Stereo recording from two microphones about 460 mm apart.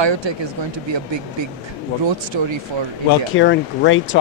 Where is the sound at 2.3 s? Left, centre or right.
Right.